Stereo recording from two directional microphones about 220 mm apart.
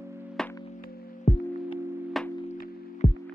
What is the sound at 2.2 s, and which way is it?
Music, centre (ahead or behind).